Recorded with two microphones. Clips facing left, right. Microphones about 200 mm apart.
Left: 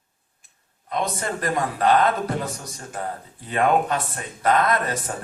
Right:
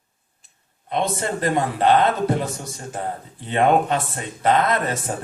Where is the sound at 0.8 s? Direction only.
25° right (ahead or behind).